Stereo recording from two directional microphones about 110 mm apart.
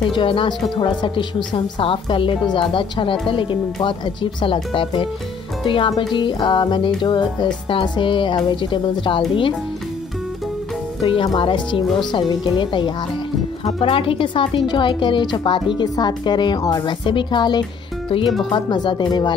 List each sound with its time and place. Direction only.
0.1 s a woman's voice: 50° left (ahead or behind)
11.0 s a woman's voice: 50° left (ahead or behind)
13.7 s a woman's voice: 55° left (ahead or behind)